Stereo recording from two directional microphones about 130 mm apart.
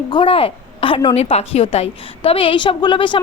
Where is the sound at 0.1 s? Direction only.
40° left (ahead or behind).